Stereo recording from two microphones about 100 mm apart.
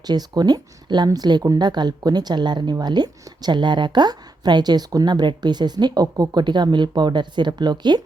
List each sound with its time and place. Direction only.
0.0 s a woman's voice: 45° right (ahead or behind)